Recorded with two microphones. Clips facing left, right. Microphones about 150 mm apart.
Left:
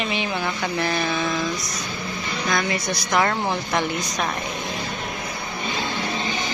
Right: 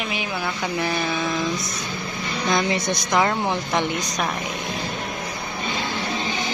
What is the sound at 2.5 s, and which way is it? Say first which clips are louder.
A woman's voice: right 3 dB; 25° right (ahead or behind).